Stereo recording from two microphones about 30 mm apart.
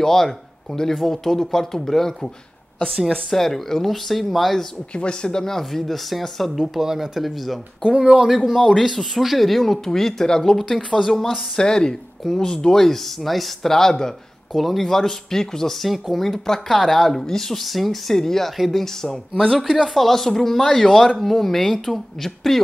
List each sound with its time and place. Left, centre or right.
0.0 s speech: centre
4.9 s speech: left
5.3 s speech: centre
6.7 s speech: centre
7.9 s speech: right
8.8 s speech: centre
10.2 s a woman's voice: left
10.5 s speech: centre
11.5 s a woman's voice: left; by 13.5 s centre
13.6 s speech: centre
14.5 s speech: centre
15.8 s speech: centre
17.7 s speech: centre
18.1 s speech: centre